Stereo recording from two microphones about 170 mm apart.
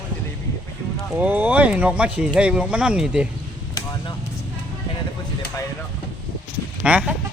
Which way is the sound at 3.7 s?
20° left (ahead or behind).